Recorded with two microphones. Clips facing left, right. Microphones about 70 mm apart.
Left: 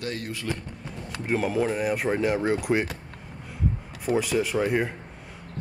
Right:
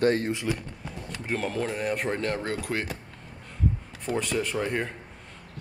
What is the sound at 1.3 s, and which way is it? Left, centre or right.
Speech, centre.